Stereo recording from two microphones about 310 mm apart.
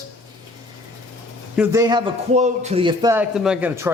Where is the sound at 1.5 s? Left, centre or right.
Centre.